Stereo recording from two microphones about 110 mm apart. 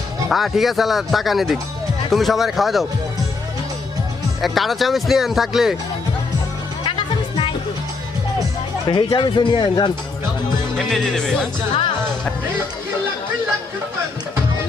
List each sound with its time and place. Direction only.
0.3 s speech: centre (ahead or behind)
4.4 s speech: centre (ahead or behind)
6.8 s music: 55° left (ahead or behind)
8.9 s speech: 50° left (ahead or behind)
10.8 s speech: 5° left (ahead or behind)